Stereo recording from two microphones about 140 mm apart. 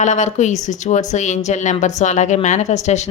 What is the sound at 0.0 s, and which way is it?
A woman's voice, 60° left (ahead or behind).